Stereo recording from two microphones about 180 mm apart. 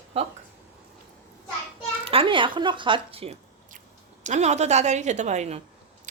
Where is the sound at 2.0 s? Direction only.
30° right (ahead or behind).